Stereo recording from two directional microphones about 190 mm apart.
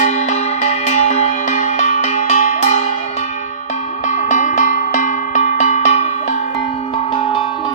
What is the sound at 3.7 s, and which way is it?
Cowbell, 40° left (ahead or behind).